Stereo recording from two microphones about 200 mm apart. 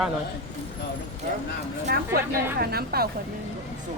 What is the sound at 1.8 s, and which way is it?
Speech, 50° right (ahead or behind).